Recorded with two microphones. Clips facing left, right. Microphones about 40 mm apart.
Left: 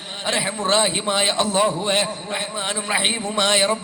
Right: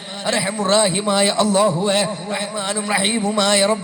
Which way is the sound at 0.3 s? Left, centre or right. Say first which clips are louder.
Right 3 dB; left.